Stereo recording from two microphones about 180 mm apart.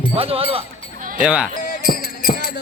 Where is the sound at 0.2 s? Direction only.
30° right (ahead or behind).